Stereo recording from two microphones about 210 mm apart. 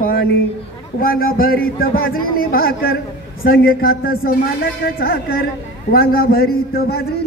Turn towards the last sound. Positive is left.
turn(degrees=45)  # may be behind; listen again after turning